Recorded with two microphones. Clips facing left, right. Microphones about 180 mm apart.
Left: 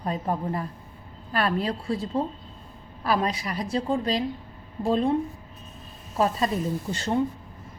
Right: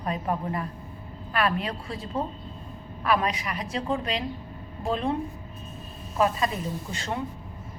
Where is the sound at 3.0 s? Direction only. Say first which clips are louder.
Even; 30° left (ahead or behind).